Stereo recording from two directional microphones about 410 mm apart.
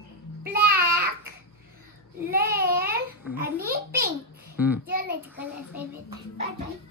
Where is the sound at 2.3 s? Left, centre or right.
Right.